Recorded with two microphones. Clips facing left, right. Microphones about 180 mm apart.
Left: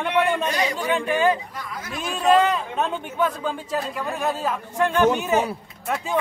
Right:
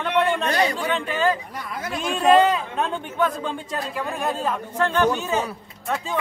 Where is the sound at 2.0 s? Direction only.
Centre (ahead or behind).